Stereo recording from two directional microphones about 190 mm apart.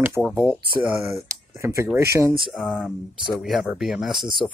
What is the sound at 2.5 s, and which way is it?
Speech, centre (ahead or behind).